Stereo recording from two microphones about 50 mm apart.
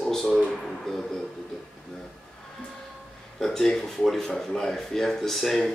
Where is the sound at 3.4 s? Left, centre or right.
Centre.